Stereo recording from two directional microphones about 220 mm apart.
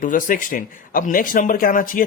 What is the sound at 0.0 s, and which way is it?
Speech, 35° left (ahead or behind).